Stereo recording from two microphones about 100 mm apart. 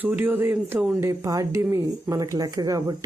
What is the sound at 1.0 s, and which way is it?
Speech, 30° right (ahead or behind).